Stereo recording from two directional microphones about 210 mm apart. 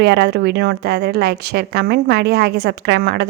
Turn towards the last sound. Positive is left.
turn(degrees=-50)  # may be behind; listen again after turning